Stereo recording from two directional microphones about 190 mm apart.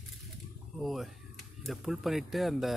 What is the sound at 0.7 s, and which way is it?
Speech, centre (ahead or behind).